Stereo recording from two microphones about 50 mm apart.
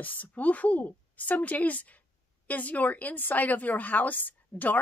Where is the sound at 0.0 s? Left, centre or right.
Left.